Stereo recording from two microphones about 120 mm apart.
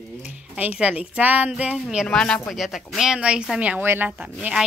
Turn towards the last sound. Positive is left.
turn(degrees=-10)  # may be behind; listen again after turning